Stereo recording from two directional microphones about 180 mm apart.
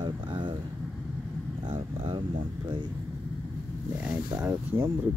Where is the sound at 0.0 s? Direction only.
25° right (ahead or behind).